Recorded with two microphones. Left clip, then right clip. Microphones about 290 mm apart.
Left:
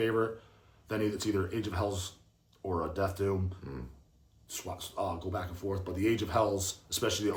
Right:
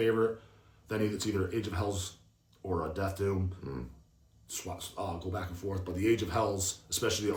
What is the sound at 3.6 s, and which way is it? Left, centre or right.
Speech, centre.